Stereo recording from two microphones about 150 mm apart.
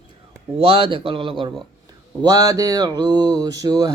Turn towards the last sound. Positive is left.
turn(degrees=-25)  # may be behind; listen again after turning